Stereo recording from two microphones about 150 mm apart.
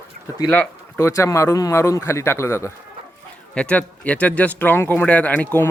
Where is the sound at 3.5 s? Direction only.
10° left (ahead or behind).